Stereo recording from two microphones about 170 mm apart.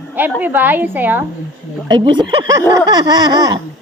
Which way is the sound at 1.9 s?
25° right (ahead or behind).